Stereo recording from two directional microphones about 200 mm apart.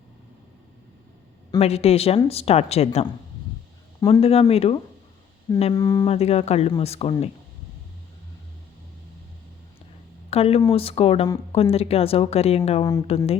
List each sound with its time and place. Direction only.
1.5 s a woman's voice: 30° left (ahead or behind)
5.7 s speech: 20° left (ahead or behind)
6.1 s a woman's voice: 30° left (ahead or behind)
10.2 s speech: 30° left (ahead or behind)